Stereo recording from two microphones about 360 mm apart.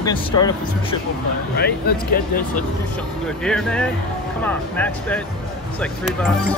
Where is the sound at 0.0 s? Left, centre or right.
Centre.